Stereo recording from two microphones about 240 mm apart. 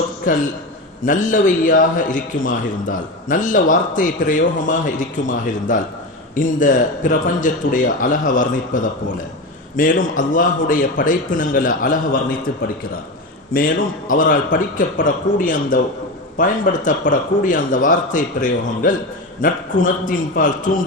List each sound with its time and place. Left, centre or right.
1.0 s a man's voice: left
13.5 s a man's voice: left